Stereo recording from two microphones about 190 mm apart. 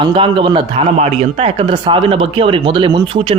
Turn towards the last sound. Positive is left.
turn(degrees=-30)  # may be behind; listen again after turning